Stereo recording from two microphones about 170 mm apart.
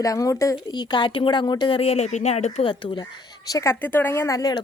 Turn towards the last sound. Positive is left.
turn(degrees=20)  # may be behind; listen again after turning